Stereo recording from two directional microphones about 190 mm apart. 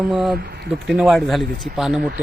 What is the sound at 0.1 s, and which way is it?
Speech, centre (ahead or behind).